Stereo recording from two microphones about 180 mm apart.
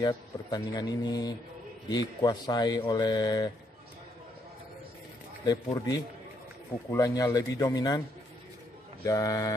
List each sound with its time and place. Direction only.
0.0 s speech: 25° left (ahead or behind)
5.4 s speech: 20° left (ahead or behind)
9.0 s speech: 20° left (ahead or behind)